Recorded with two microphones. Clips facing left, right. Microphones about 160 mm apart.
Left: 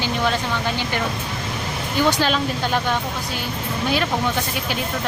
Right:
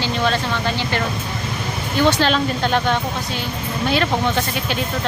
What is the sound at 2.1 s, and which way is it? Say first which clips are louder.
Speech: right 3 dB; 10° left (ahead or behind).